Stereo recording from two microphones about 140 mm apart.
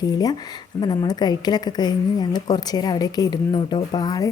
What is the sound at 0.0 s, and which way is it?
A woman's voice, 30° left (ahead or behind).